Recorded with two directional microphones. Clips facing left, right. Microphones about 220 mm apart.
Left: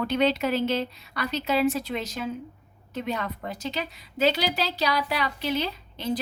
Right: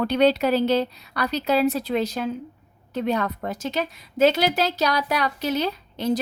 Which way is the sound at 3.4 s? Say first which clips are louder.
Right 5 dB; 45° right (ahead or behind).